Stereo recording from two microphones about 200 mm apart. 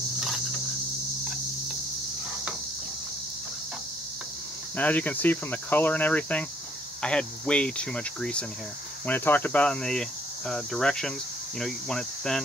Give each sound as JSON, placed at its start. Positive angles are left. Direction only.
{"t": 4.7, "sound": "speech", "side_deg": 10}